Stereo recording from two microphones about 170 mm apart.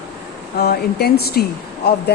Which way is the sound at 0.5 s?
70° left (ahead or behind).